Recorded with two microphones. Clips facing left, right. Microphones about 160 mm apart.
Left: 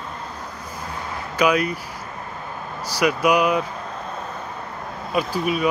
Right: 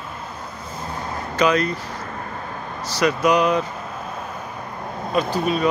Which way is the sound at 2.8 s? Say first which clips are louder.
Right 1 dB; 10° left (ahead or behind).